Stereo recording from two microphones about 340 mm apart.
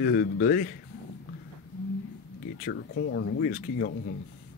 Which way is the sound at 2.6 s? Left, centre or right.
Left.